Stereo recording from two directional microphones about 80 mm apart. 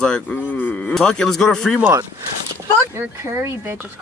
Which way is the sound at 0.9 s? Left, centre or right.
Centre.